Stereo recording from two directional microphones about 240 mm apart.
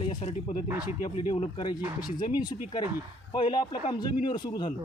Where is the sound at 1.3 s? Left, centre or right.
Centre.